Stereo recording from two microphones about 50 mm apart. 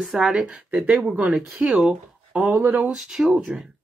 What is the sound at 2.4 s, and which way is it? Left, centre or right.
Speech, right.